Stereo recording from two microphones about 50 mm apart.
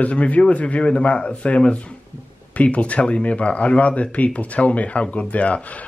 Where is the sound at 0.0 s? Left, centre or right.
Left.